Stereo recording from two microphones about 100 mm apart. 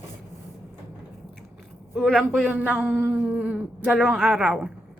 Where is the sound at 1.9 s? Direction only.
5° left (ahead or behind).